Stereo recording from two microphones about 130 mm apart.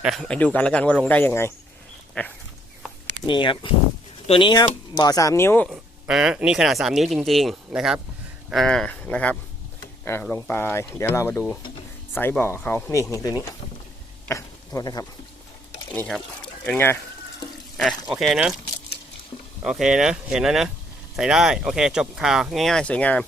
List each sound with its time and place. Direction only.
0.0 s speech: centre (ahead or behind)
0.3 s speech: 10° left (ahead or behind)
3.2 s speech: 40° left (ahead or behind)
4.5 s speech: 30° left (ahead or behind)
5.6 s speech: 5° right (ahead or behind); by 15.0 s 25° left (ahead or behind)
16.6 s speech: 15° left (ahead or behind)
18.0 s speech: centre (ahead or behind)
19.6 s speech: 5° right (ahead or behind)